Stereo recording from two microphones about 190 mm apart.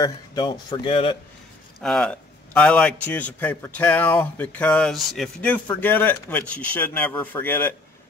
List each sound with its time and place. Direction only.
0.0 s speech: 20° left (ahead or behind)
1.8 s a man's voice: 5° left (ahead or behind)